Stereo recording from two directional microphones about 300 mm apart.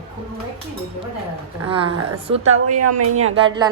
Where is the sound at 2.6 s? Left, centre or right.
Right.